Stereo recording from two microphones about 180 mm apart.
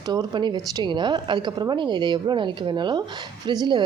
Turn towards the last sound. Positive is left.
turn(degrees=-25)  # may be behind; listen again after turning